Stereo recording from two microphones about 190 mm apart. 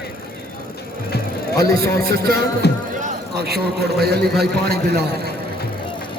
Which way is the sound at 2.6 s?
60° left (ahead or behind).